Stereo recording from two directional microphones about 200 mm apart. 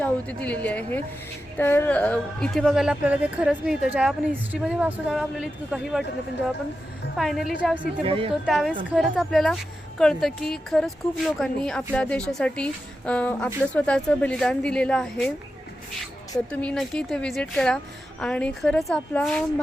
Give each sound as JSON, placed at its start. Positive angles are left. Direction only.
{"t": 0.0, "sound": "a woman's voice", "side_deg": 5}
{"t": 7.2, "sound": "a woman's voice", "side_deg": 0}
{"t": 8.0, "sound": "speech", "side_deg": -30}
{"t": 8.4, "sound": "a woman's voice", "side_deg": 0}
{"t": 16.5, "sound": "a woman's voice", "side_deg": 5}